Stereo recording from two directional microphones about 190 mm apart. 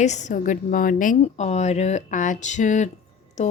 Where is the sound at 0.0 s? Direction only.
40° left (ahead or behind).